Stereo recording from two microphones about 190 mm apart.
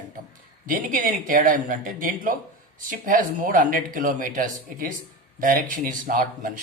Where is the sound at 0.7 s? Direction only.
45° right (ahead or behind).